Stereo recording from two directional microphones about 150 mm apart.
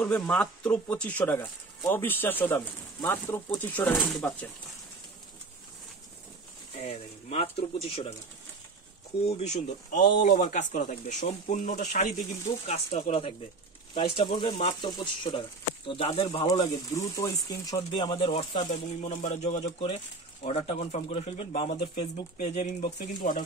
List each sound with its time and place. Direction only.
0.0 s speech: 10° left (ahead or behind)
3.9 s speech: centre (ahead or behind)
6.8 s speech: 40° left (ahead or behind)
9.2 s speech: 45° left (ahead or behind)
10.2 s speech: 70° left (ahead or behind); by 13.2 s 50° left (ahead or behind)
13.9 s speech: 35° left (ahead or behind)
16.4 s speech: 25° left (ahead or behind)
18.6 s speech: 50° left (ahead or behind)